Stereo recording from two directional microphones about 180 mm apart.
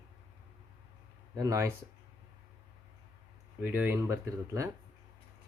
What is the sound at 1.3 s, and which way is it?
Speech, 20° right (ahead or behind).